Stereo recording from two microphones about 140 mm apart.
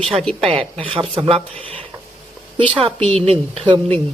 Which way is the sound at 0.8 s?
40° right (ahead or behind).